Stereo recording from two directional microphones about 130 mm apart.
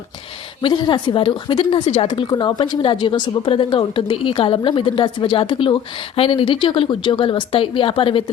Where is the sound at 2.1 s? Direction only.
35° left (ahead or behind).